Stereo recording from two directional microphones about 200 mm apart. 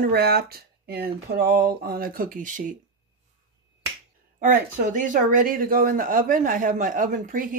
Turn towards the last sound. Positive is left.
turn(degrees=-40)  # may be behind; listen again after turning